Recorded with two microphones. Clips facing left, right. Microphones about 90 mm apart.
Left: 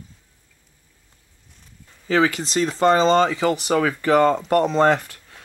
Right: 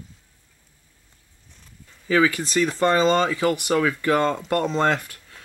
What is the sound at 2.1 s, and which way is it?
Speech, 30° left (ahead or behind).